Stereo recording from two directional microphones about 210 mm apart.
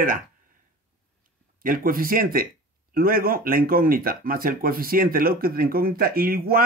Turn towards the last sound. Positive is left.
turn(degrees=-45)  # may be behind; listen again after turning